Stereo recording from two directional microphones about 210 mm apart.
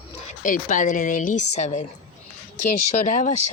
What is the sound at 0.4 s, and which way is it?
A woman's voice, 40° left (ahead or behind).